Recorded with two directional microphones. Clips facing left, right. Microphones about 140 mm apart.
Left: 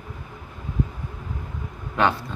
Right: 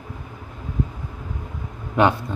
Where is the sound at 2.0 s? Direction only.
15° right (ahead or behind).